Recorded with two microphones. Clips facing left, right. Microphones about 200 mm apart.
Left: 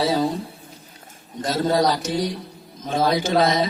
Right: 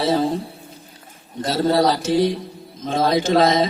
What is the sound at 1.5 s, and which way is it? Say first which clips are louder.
Speech: right 2 dB; 30° right (ahead or behind).